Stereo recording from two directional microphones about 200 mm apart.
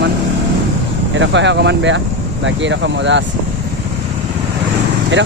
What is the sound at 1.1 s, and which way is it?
Speech, 65° right (ahead or behind).